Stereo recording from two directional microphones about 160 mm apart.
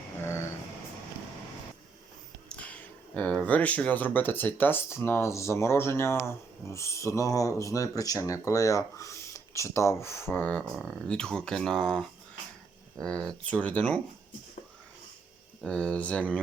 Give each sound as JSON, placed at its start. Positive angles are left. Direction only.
{"t": 2.5, "sound": "speech", "side_deg": 10}
{"t": 15.6, "sound": "speech", "side_deg": 5}